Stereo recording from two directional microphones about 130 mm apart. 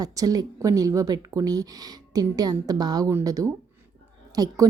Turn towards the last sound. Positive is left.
turn(degrees=-30)  # may be behind; listen again after turning